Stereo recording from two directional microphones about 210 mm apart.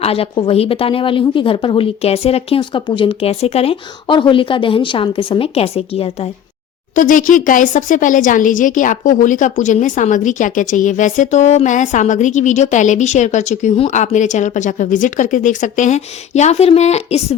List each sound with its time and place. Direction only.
0.0 s a woman's voice: 25° left (ahead or behind)
6.9 s speech: 40° left (ahead or behind)